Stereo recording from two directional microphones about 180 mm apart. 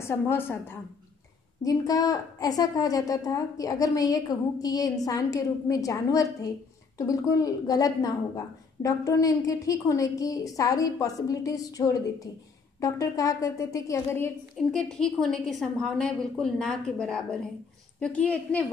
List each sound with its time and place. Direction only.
0.0 s a woman's voice: 15° left (ahead or behind)